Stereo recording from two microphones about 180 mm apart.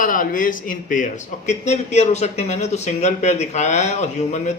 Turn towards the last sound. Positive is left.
turn(degrees=40)  # may be behind; listen again after turning